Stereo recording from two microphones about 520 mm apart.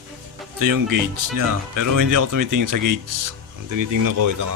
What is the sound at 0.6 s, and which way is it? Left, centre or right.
Speech, right.